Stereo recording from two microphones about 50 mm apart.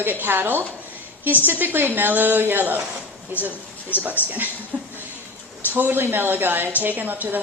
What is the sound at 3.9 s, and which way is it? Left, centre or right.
Speech, left.